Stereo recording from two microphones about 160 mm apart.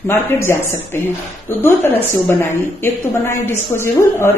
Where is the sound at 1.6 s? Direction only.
15° left (ahead or behind).